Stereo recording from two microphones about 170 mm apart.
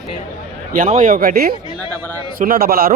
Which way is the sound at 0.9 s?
50° right (ahead or behind).